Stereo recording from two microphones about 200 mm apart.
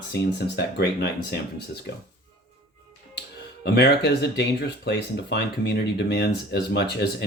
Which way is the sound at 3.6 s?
55° left (ahead or behind).